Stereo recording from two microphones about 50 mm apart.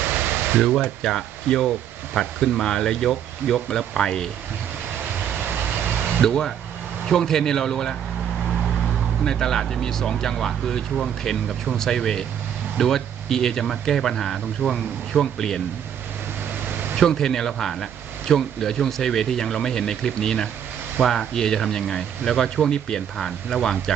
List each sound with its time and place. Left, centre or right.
0.0 s a sound: right
1.0 s speech: centre
5.3 s vehicle: right
6.2 s speech: centre
9.2 s speech: centre
16.6 s air conditioning: right
17.0 s speech: centre